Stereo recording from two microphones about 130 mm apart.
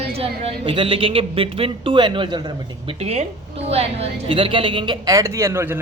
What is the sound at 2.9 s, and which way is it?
A woman's voice, 55° right (ahead or behind).